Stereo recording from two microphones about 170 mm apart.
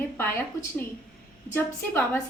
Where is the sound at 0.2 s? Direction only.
15° left (ahead or behind).